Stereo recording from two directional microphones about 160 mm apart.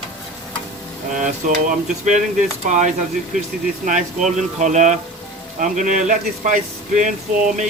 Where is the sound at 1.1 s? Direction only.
55° right (ahead or behind).